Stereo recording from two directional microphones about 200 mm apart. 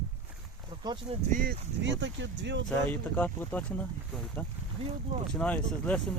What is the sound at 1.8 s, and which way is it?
Speech, 65° right (ahead or behind).